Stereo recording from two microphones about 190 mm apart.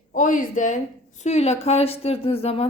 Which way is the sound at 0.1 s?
45° left (ahead or behind).